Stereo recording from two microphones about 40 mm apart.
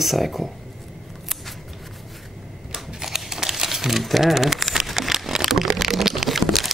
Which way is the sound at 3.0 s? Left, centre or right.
Centre.